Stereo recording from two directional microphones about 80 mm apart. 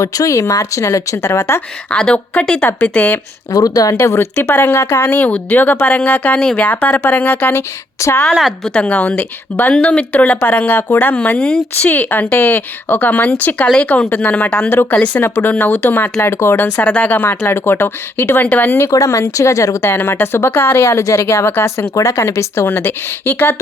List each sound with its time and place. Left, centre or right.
0.0 s speech: left
1.9 s a woman's voice: centre
3.5 s speech: left
3.9 s a woman's voice: left
7.9 s a woman's voice: left
8.4 s a woman's voice: centre
8.7 s speech: centre
18.9 s speech: left
19.9 s speech: left